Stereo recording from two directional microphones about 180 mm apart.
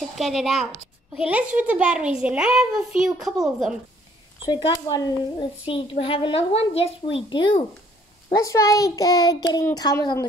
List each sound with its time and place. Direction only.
0.2 s a child's voice: centre (ahead or behind)
4.5 s a child's voice: 25° left (ahead or behind)